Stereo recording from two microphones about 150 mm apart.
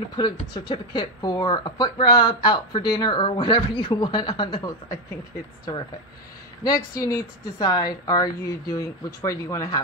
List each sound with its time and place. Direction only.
0.1 s speech: 30° left (ahead or behind)
7.0 s speech: 20° left (ahead or behind)